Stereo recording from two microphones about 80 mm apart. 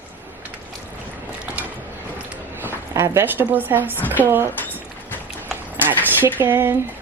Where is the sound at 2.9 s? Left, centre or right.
Right.